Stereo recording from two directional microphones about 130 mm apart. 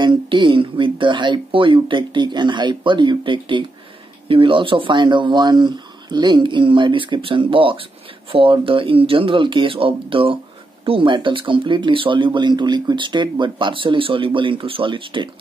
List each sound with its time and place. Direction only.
0.0 s speech: 40° right (ahead or behind)